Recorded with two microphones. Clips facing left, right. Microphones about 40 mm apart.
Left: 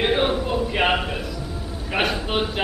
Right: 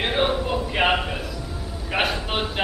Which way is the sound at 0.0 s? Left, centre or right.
Centre.